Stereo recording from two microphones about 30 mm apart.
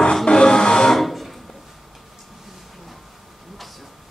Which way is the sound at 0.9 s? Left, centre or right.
Centre.